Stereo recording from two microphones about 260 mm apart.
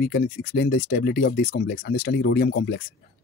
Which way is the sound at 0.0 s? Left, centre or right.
Left.